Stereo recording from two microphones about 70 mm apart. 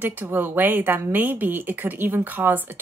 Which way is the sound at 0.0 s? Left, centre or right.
Right.